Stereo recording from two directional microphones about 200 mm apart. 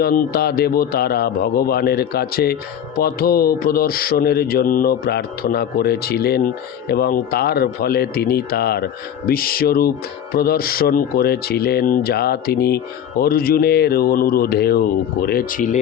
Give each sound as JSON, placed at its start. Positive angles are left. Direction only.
{"t": 0.0, "sound": "speech", "side_deg": 50}